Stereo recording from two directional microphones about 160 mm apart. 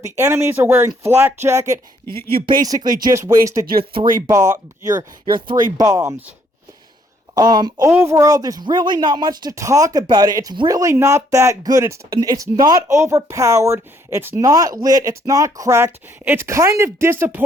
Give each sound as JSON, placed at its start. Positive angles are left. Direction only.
{"t": 0.0, "sound": "speech", "side_deg": -15}
{"t": 2.6, "sound": "speech", "side_deg": -20}
{"t": 7.3, "sound": "speech", "side_deg": -25}